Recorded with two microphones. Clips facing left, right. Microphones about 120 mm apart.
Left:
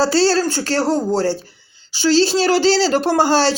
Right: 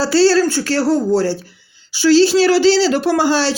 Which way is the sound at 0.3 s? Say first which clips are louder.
Right 3 dB; 45° left (ahead or behind).